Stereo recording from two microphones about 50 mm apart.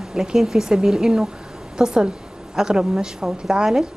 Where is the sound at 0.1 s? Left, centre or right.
Centre.